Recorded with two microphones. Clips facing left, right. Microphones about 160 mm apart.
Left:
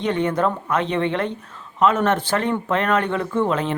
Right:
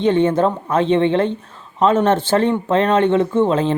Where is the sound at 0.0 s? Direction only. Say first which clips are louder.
Right 6 dB; 30° right (ahead or behind).